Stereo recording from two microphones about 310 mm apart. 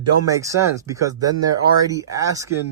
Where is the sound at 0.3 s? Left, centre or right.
Centre.